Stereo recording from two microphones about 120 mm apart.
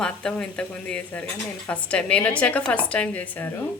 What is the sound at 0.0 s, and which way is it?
A woman's voice, 5° left (ahead or behind).